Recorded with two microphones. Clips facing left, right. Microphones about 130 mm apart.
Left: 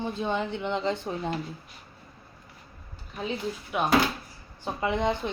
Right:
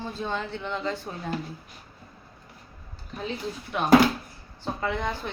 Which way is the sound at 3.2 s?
10° left (ahead or behind).